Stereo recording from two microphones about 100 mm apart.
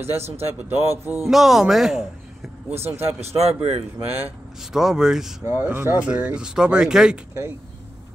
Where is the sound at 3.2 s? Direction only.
90° right.